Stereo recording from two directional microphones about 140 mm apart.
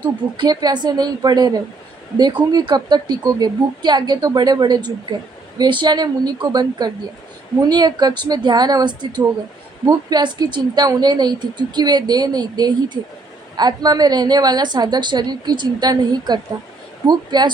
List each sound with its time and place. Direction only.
0.0 s a woman's voice: 30° right (ahead or behind)